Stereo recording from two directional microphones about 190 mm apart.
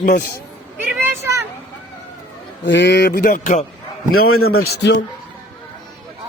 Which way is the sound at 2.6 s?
65° left (ahead or behind).